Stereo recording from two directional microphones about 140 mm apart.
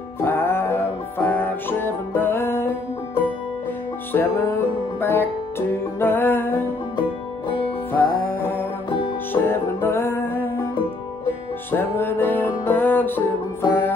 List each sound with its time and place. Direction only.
0.2 s music: 15° left (ahead or behind)
4.1 s music: 15° left (ahead or behind)
7.9 s music: 15° left (ahead or behind)
11.7 s music: 15° left (ahead or behind)